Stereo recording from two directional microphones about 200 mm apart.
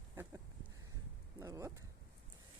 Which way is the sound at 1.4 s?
15° right (ahead or behind).